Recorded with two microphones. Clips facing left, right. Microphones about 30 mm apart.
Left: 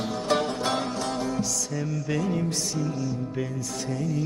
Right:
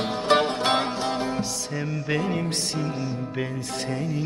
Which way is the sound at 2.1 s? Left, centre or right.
Right.